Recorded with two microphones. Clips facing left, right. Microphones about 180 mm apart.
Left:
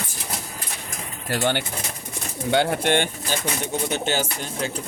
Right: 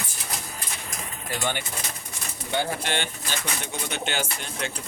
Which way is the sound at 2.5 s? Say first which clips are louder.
Left 7 dB; 70° left (ahead or behind).